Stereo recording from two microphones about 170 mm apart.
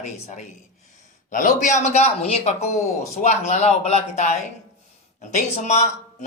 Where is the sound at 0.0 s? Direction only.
45° left (ahead or behind).